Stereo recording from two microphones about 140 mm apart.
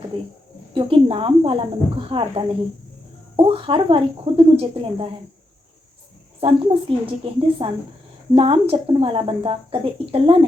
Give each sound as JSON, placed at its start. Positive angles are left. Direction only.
{"t": 0.7, "sound": "speech", "side_deg": -40}
{"t": 6.4, "sound": "speech", "side_deg": -40}